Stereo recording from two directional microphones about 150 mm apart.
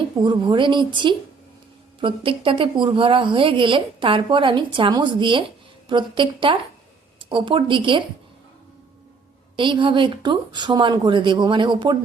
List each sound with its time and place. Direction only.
0.2 s a woman's voice: 30° right (ahead or behind)
9.6 s a woman's voice: 35° right (ahead or behind)